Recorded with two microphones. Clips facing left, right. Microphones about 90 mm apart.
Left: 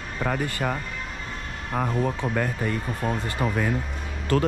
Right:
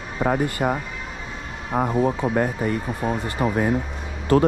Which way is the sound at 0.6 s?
65° right (ahead or behind).